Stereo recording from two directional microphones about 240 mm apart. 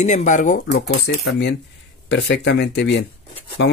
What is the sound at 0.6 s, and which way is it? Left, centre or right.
Speech, left.